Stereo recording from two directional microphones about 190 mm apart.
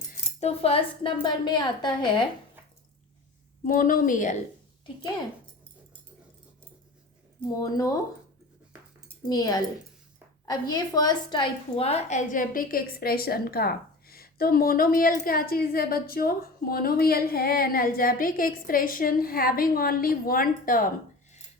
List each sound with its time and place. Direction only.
0.1 s speech: 35° left (ahead or behind)
3.6 s a woman's voice: 45° left (ahead or behind)
7.6 s speech: 20° left (ahead or behind)
9.3 s a woman's voice: 20° left (ahead or behind); by 20.9 s 45° left (ahead or behind)